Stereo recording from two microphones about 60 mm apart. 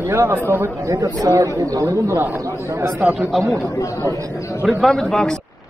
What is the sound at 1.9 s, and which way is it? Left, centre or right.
Speech, right.